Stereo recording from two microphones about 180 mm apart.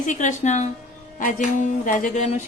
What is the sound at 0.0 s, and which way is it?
A woman's voice, 45° left (ahead or behind).